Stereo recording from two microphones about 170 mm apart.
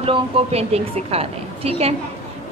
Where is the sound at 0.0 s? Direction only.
35° right (ahead or behind).